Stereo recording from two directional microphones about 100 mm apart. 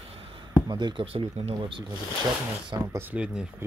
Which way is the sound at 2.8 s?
25° right (ahead or behind).